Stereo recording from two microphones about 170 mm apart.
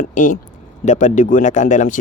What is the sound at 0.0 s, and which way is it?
A man's voice, 50° left (ahead or behind).